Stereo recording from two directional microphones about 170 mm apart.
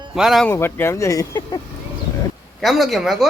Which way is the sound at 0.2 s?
Centre (ahead or behind).